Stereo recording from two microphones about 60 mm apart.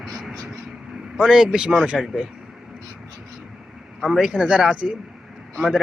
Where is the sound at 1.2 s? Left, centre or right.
Centre.